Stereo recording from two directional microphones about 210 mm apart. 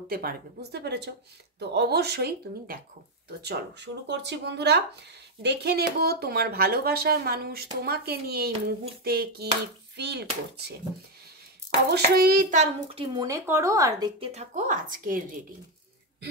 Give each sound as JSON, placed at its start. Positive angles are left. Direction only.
{"t": 0.1, "sound": "speech", "side_deg": -45}
{"t": 11.9, "sound": "speech", "side_deg": -50}
{"t": 13.0, "sound": "speech", "side_deg": -20}
{"t": 14.3, "sound": "speech", "side_deg": -35}